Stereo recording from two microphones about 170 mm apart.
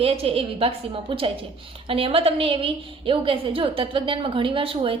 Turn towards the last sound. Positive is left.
turn(degrees=-30)  # may be behind; listen again after turning